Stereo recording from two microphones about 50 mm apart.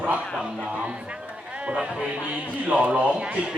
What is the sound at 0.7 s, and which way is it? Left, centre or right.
A man's voice, right.